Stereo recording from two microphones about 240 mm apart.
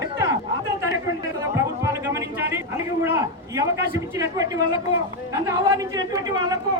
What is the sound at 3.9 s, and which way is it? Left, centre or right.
A woman's voice, centre.